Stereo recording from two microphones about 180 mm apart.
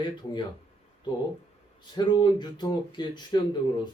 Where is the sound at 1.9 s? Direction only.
25° left (ahead or behind).